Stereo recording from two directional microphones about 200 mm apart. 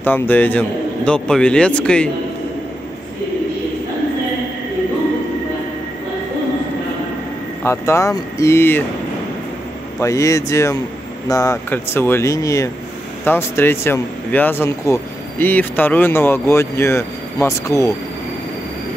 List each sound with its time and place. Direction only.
0.0 s a man's voice: 10° left (ahead or behind)
7.6 s speech: 15° left (ahead or behind)
9.9 s speech: 15° left (ahead or behind)